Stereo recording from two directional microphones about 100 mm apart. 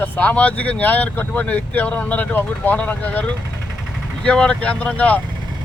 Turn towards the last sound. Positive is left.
turn(degrees=15)  # may be behind; listen again after turning